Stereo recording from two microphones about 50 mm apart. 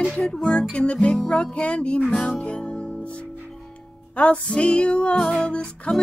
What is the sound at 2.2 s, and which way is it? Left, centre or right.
Music, centre.